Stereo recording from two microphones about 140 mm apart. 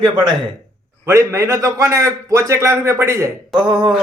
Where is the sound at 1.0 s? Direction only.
20° right (ahead or behind).